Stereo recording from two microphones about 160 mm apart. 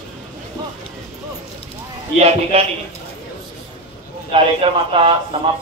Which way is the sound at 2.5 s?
40° right (ahead or behind).